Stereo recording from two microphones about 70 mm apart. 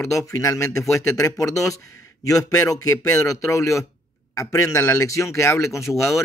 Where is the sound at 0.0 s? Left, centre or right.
Left.